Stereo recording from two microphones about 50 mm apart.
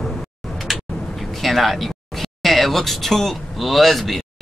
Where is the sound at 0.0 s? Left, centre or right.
Centre.